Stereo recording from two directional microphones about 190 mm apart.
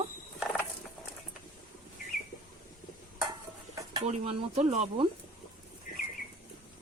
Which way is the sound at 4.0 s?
35° right (ahead or behind).